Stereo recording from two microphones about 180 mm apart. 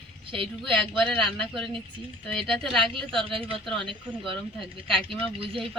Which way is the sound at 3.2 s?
30° right (ahead or behind).